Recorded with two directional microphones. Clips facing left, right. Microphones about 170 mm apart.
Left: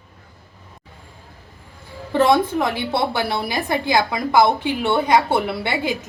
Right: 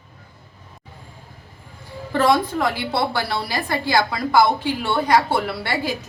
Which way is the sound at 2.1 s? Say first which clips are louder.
Left 2 dB; 20° left (ahead or behind).